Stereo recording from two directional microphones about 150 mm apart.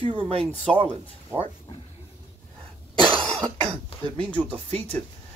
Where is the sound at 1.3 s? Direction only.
10° right (ahead or behind).